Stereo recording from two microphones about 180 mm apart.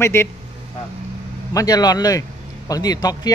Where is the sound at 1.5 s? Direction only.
20° left (ahead or behind).